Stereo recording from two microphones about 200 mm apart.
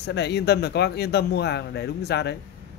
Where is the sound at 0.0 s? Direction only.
55° left (ahead or behind).